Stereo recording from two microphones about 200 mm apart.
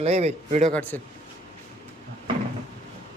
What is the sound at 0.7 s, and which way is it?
Speech, 10° left (ahead or behind).